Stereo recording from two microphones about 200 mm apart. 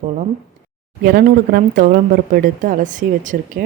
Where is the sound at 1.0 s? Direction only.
45° right (ahead or behind).